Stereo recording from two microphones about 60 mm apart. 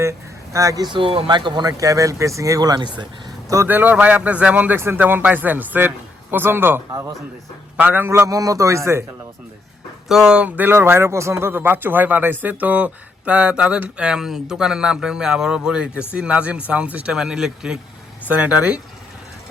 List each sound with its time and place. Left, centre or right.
0.0 s a sound: right
1.6 s speech: right
3.7 s a man's voice: right
7.8 s speech: right
8.0 s a man's voice: right
8.3 s speech: right
10.1 s speech: centre
10.3 s speech: right
10.8 s speech: right; by 17.7 s centre
18.3 s speech: right